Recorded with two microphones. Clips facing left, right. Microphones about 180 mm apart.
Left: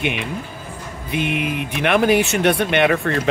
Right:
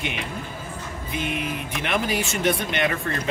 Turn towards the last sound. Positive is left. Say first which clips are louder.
# left 8 dB
turn(degrees=70)  # may be behind; listen again after turning